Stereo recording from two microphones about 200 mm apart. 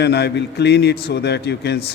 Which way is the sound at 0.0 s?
55° left (ahead or behind).